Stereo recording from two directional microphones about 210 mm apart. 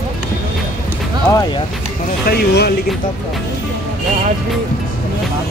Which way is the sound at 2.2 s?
50° left (ahead or behind).